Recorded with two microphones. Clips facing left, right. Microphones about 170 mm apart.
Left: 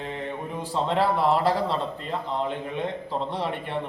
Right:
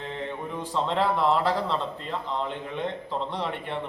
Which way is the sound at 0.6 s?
10° left (ahead or behind).